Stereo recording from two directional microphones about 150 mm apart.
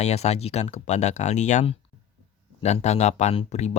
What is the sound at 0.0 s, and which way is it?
Speech, 45° left (ahead or behind).